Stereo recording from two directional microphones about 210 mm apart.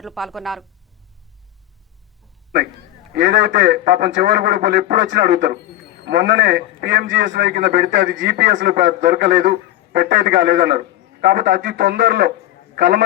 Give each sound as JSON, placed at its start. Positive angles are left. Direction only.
{"t": 0.0, "sound": "speech", "side_deg": 0}
{"t": 3.2, "sound": "a man's voice", "side_deg": -50}
{"t": 8.4, "sound": "a man's voice", "side_deg": -45}
{"t": 11.3, "sound": "a man's voice", "side_deg": -40}